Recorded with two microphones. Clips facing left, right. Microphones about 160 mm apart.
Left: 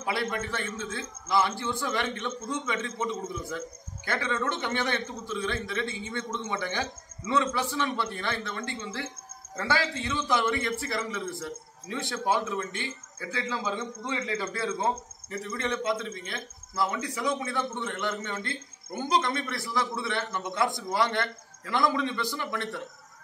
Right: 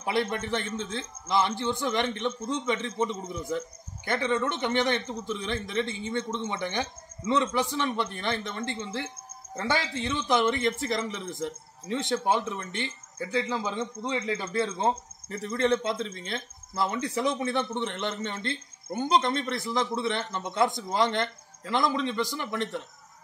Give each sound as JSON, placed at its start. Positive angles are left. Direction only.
{"t": 0.0, "sound": "a man's voice", "side_deg": -20}
{"t": 14.8, "sound": "speech", "side_deg": -30}